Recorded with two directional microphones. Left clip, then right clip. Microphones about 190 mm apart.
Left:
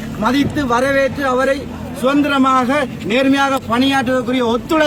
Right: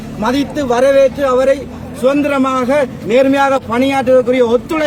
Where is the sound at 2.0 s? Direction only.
10° right (ahead or behind).